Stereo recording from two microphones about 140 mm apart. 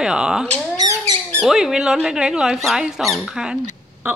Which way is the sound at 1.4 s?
5° right (ahead or behind).